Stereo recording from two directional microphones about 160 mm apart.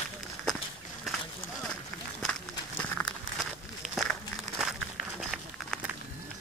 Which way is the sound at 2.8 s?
10° left (ahead or behind).